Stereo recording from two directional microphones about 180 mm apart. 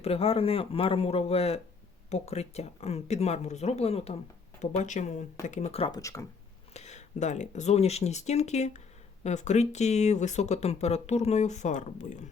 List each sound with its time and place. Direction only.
0.0 s speech: 35° left (ahead or behind)
6.0 s speech: 20° left (ahead or behind)
6.7 s speech: 40° left (ahead or behind)